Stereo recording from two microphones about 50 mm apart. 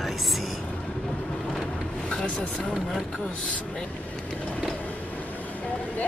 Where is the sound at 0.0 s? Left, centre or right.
Centre.